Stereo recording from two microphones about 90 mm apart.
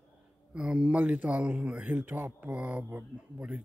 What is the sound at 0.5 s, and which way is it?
Speech, 10° right (ahead or behind).